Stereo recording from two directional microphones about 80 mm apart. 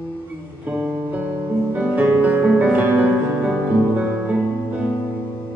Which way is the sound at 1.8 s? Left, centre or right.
Right.